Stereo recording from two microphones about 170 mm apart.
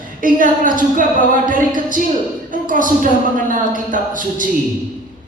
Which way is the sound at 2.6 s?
50° right (ahead or behind).